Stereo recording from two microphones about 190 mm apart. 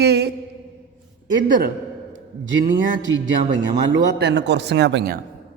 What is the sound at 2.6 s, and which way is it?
Speech, 45° right (ahead or behind).